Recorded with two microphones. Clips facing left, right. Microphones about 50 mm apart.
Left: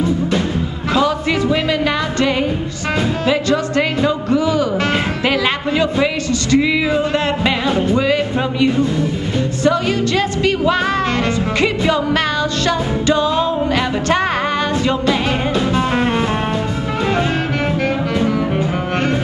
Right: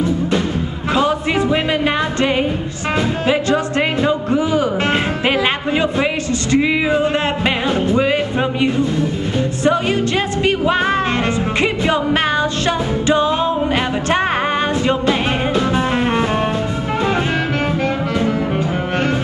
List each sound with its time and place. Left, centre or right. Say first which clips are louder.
0.9 s music: even; right
3.3 s music: even; right
6.5 s music: even; right
9.7 s music: even; right